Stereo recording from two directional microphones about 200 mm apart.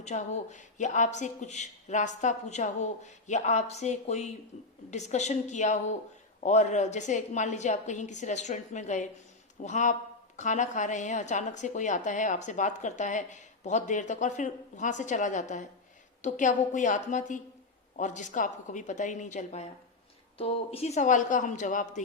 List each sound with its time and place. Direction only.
0.0 s a woman's voice: 35° left (ahead or behind)